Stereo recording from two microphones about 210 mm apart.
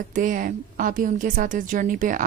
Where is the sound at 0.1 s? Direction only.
40° right (ahead or behind).